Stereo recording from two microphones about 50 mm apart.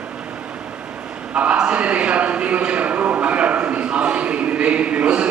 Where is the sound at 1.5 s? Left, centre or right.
Right.